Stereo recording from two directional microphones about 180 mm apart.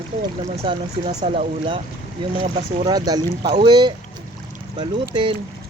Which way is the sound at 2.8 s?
20° right (ahead or behind).